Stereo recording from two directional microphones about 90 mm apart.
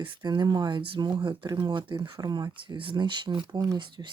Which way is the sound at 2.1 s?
50° right (ahead or behind).